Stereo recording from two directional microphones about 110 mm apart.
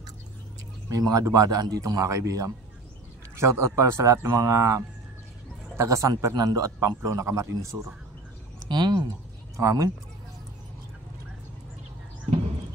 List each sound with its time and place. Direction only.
0.9 s a man's voice: 35° right (ahead or behind)
8.6 s speech: 40° right (ahead or behind)
9.6 s a man's voice: 30° right (ahead or behind)